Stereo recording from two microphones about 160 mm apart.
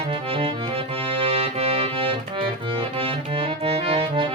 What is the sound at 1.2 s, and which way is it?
Music, 40° right (ahead or behind).